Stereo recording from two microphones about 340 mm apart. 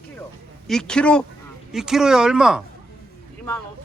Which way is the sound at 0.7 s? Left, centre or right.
Centre.